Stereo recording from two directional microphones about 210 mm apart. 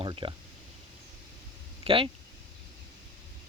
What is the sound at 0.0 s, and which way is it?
Speech, 25° right (ahead or behind).